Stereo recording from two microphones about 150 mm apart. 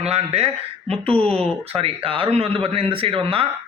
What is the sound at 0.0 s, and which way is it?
Speech, 45° right (ahead or behind).